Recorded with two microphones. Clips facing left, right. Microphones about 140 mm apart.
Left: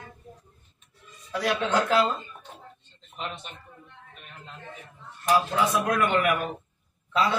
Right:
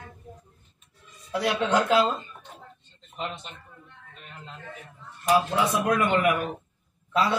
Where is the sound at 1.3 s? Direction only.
25° right (ahead or behind).